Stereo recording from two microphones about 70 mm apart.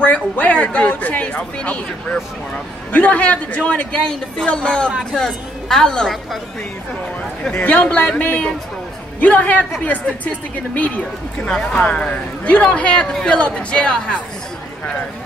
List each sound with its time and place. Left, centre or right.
0.0 s a man's voice: centre
8.2 s a man's voice: left